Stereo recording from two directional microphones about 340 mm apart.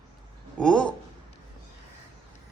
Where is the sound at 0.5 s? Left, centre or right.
Centre.